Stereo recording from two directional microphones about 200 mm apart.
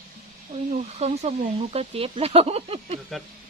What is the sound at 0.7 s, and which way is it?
Speech, 35° right (ahead or behind).